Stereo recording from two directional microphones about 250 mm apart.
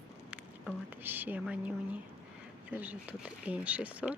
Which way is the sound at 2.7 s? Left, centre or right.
Centre.